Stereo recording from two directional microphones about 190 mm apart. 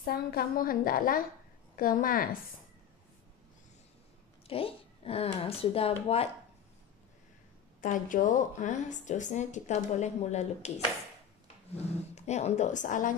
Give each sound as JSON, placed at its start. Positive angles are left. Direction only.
{"t": 0.0, "sound": "a woman's voice", "side_deg": 50}
{"t": 4.5, "sound": "a woman's voice", "side_deg": 30}
{"t": 7.8, "sound": "a woman's voice", "side_deg": 40}
{"t": 11.7, "sound": "a woman's voice", "side_deg": 35}